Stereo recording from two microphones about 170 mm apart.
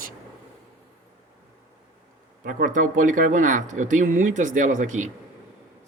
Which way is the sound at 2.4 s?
55° right (ahead or behind).